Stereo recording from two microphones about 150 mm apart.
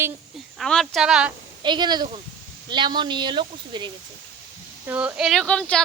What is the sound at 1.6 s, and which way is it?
Speech, 30° right (ahead or behind).